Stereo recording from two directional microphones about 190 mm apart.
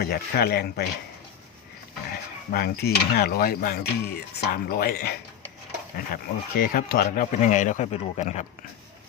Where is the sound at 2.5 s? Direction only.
55° left (ahead or behind).